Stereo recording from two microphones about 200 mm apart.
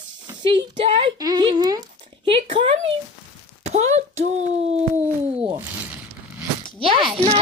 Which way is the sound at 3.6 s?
35° right (ahead or behind).